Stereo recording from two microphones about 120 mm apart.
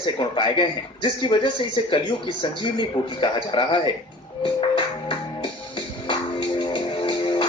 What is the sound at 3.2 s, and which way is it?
Speech, 45° left (ahead or behind).